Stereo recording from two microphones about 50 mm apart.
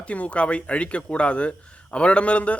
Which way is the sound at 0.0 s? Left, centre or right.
Left.